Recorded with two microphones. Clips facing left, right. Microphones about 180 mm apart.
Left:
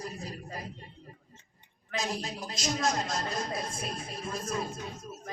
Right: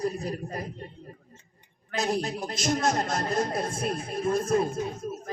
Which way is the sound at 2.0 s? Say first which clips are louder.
Right 7 dB; 60° right (ahead or behind).